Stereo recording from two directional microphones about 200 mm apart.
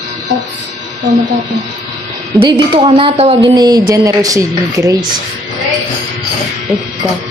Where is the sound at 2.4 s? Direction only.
25° right (ahead or behind).